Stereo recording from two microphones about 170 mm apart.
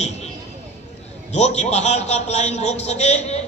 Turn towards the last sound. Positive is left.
turn(degrees=40)  # may be behind; listen again after turning